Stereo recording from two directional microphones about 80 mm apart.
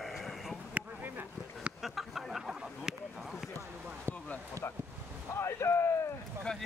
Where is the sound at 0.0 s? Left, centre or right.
Centre.